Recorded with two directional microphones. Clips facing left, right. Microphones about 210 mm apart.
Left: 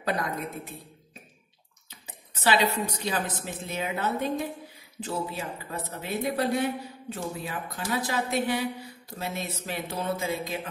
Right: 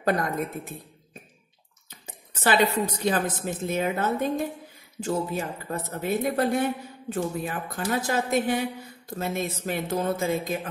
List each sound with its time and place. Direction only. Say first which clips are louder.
0.0 s speech: right 4 dB; 50° right (ahead or behind)
1.9 s speech: right 3 dB; 45° right (ahead or behind)